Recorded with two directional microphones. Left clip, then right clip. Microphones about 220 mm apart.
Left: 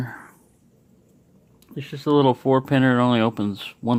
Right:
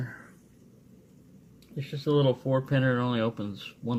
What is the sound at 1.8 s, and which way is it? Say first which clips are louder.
Speech: left 7 dB; 45° left (ahead or behind).